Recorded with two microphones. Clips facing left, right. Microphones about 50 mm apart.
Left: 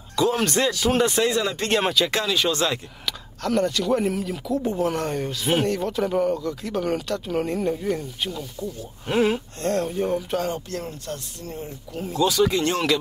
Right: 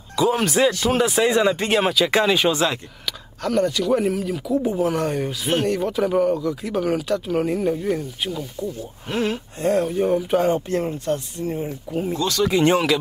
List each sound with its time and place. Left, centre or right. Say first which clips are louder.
0.1 s speech: right 2 dB; centre
1.3 s speech: right 4 dB; centre
2.2 s speech: right 4 dB; centre
9.0 s speech: left 3 dB; centre
9.6 s speech: right 8 dB; centre
12.2 s speech: left 4 dB; centre
12.4 s speech: right 5 dB; centre